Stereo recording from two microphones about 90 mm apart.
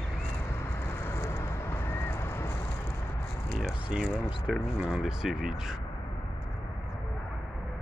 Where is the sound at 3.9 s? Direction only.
10° right (ahead or behind).